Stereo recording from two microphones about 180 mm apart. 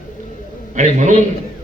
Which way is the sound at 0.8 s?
45° right (ahead or behind).